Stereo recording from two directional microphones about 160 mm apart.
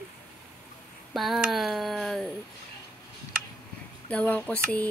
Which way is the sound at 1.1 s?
Centre (ahead or behind).